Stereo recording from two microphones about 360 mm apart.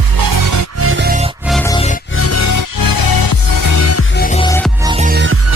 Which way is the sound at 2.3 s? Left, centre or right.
Left.